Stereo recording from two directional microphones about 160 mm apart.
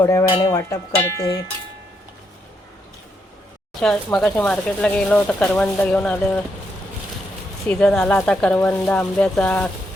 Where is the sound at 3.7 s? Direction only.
5° left (ahead or behind).